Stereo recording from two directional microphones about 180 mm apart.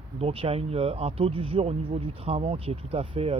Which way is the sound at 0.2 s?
30° right (ahead or behind).